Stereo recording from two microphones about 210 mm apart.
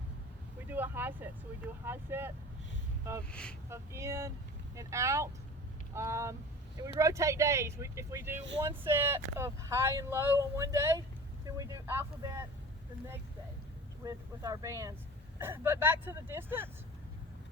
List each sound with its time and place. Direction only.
0.7 s speech: 10° right (ahead or behind)
3.7 s speech: 15° right (ahead or behind)
14.0 s speech: 15° right (ahead or behind)